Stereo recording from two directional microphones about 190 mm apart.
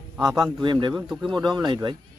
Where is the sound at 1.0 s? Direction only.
5° right (ahead or behind).